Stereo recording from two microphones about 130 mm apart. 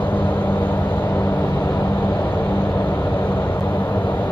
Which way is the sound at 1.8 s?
10° left (ahead or behind).